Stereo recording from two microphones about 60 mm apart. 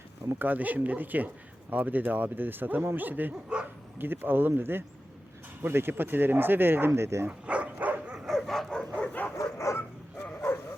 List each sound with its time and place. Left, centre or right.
0.3 s speech: right
7.3 s dog: right
8.3 s bow-wow: centre
9.0 s bow-wow: left
9.4 s dog: left
10.2 s bow-wow: left